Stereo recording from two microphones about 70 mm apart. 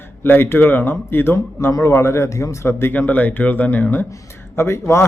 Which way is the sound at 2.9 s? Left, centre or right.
Left.